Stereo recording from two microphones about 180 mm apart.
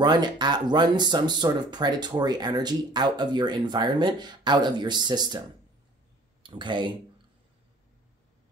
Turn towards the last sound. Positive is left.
turn(degrees=-25)  # may be behind; listen again after turning